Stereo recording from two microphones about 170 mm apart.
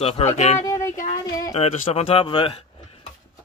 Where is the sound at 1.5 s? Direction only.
40° left (ahead or behind).